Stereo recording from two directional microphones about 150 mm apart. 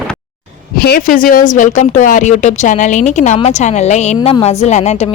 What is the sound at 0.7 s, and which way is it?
A woman's voice, 90° left.